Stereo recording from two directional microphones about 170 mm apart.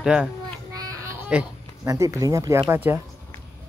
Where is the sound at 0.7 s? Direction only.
20° right (ahead or behind).